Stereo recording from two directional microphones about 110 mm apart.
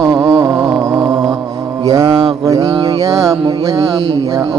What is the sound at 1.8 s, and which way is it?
Mantra, 30° right (ahead or behind).